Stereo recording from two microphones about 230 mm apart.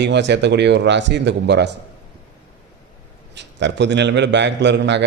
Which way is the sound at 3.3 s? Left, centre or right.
Right.